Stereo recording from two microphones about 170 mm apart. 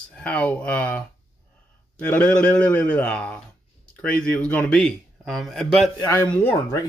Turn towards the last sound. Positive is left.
turn(degrees=20)  # may be behind; listen again after turning